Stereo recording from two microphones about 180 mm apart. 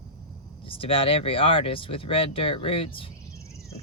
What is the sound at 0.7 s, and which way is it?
Speech, 30° left (ahead or behind).